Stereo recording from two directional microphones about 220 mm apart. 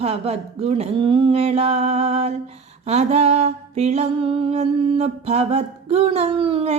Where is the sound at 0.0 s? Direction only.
25° right (ahead or behind).